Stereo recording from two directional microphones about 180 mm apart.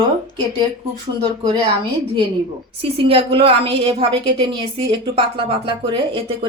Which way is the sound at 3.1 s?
30° right (ahead or behind).